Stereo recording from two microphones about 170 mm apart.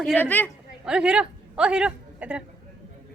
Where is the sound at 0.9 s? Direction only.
5° right (ahead or behind).